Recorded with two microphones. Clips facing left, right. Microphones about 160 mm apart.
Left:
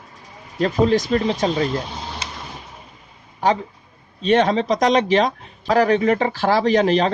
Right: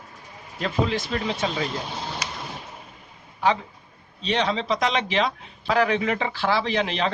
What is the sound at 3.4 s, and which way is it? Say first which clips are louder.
Speech: left 3 dB; 40° left (ahead or behind).